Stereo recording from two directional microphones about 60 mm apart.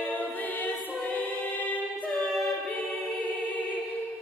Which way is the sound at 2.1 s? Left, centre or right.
Centre.